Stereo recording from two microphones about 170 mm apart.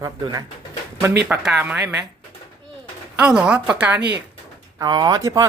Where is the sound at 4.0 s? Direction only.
80° right.